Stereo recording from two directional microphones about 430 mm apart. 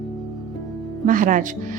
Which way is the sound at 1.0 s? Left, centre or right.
Centre.